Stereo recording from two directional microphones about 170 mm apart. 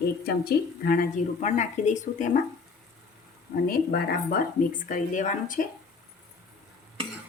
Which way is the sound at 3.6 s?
60° left (ahead or behind).